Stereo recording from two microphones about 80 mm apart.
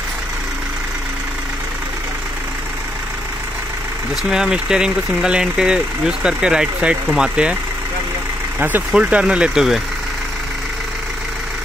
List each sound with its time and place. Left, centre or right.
4.2 s speech: centre
8.5 s speech: right
8.9 s speech: centre